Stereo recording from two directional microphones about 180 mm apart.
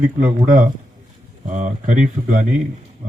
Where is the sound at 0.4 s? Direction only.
45° right (ahead or behind).